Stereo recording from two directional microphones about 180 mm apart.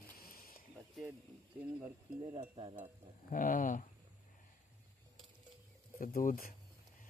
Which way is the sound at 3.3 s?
45° left (ahead or behind).